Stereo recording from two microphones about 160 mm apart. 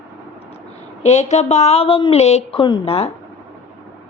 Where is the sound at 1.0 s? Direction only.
45° left (ahead or behind).